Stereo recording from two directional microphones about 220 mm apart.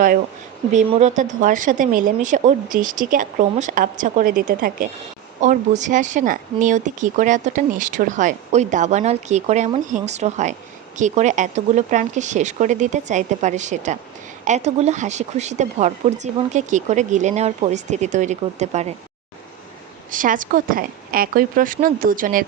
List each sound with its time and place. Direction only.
0.7 s speech: 30° right (ahead or behind)
20.1 s speech: 35° right (ahead or behind)